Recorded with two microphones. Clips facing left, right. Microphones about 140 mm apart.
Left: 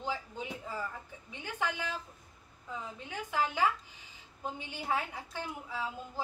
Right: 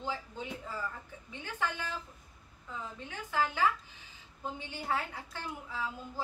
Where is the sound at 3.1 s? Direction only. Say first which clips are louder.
Even; 15° left (ahead or behind).